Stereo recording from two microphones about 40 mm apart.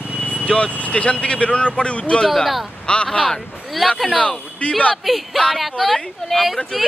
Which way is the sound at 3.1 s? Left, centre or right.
Centre.